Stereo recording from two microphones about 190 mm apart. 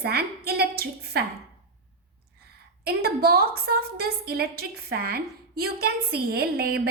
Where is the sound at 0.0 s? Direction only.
55° right (ahead or behind).